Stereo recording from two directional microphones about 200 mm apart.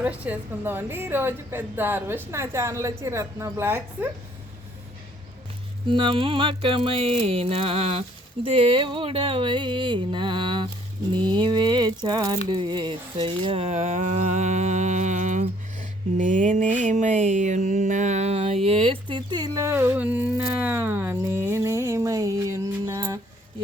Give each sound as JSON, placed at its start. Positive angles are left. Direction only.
{"t": 0.0, "sound": "a woman's voice", "side_deg": -10}
{"t": 5.9, "sound": "music", "side_deg": -25}
{"t": 12.5, "sound": "a sound", "side_deg": -20}